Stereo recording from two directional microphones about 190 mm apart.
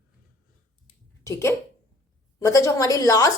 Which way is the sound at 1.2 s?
15° left (ahead or behind).